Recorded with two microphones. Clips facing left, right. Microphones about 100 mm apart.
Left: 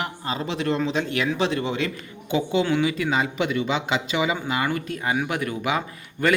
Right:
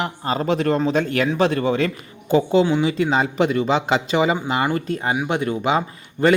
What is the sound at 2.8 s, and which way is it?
Speech, 30° right (ahead or behind).